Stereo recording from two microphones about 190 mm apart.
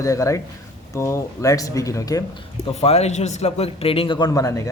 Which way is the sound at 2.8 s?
35° left (ahead or behind).